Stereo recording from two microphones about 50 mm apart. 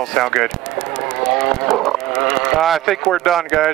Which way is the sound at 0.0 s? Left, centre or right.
Centre.